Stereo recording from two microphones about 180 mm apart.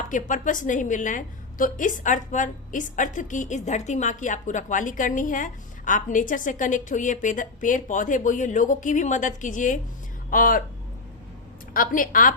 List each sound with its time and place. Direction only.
0.1 s a woman's voice: 45° left (ahead or behind)
11.7 s a woman's voice: 50° left (ahead or behind)